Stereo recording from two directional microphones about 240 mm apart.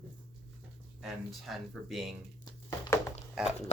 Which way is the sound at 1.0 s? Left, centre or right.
Centre.